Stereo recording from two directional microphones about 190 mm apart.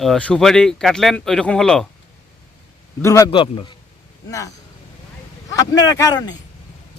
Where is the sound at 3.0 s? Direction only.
15° left (ahead or behind).